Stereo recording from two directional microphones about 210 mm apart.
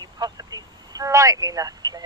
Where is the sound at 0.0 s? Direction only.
20° right (ahead or behind).